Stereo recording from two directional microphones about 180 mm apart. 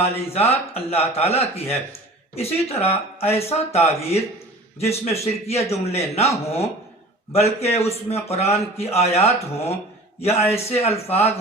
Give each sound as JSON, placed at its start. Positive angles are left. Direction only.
{"t": 0.0, "sound": "a man's voice", "side_deg": 35}